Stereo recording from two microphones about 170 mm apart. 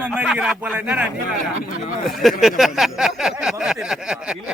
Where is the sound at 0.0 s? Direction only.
10° right (ahead or behind).